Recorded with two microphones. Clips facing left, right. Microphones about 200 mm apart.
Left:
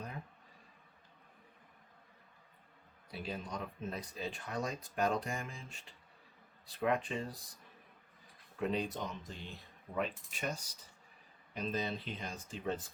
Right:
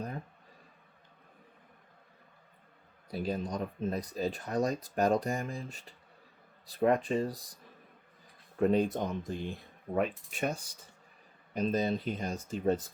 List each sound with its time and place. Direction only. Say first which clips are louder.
3.1 s speech: right 8 dB; 40° right (ahead or behind)
8.5 s mechanisms: right 9 dB; 45° right (ahead or behind)